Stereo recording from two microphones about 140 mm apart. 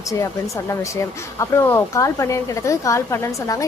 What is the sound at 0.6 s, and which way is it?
Speech, 20° left (ahead or behind).